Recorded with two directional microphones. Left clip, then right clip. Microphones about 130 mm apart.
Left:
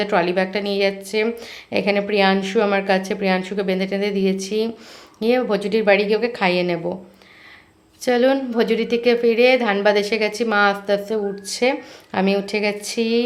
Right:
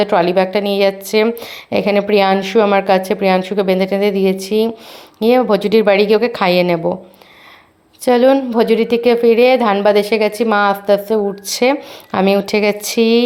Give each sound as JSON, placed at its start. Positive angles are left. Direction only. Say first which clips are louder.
{"t": 0.0, "sound": "a woman's voice", "louder": "right 6 dB", "side_deg": -35}
{"t": 8.0, "sound": "a woman's voice", "louder": "right 6 dB", "side_deg": -30}